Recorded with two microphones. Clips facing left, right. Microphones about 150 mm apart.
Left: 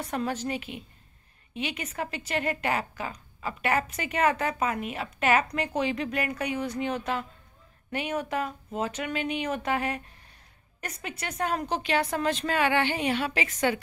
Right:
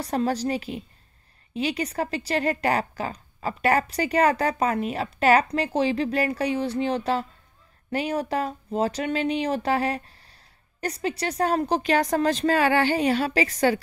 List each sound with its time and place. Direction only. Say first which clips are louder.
0.0 s a woman's voice: right 6 dB; 35° right (ahead or behind)